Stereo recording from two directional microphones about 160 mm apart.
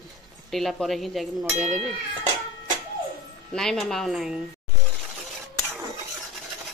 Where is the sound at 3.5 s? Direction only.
5° left (ahead or behind).